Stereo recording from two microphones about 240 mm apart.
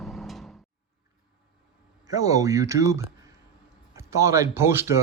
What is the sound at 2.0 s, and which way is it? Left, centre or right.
Speech, centre.